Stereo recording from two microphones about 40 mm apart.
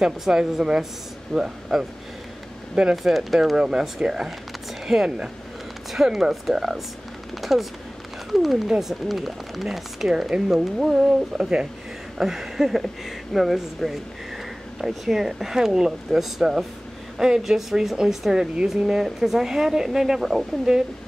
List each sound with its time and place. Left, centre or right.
0.4 s speech: centre
3.0 s speech: centre
3.5 s speech: centre
5.9 s speech: centre